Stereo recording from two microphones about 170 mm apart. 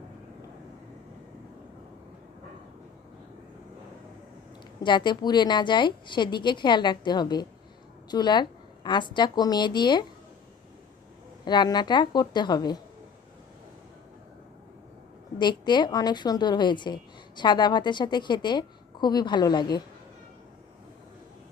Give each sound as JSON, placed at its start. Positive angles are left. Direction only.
{"t": 4.8, "sound": "a woman's voice", "side_deg": 25}
{"t": 11.4, "sound": "a woman's voice", "side_deg": 25}
{"t": 15.4, "sound": "a woman's voice", "side_deg": 25}